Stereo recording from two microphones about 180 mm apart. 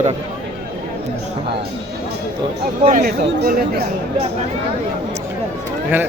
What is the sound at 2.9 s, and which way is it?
Speech, 55° right (ahead or behind).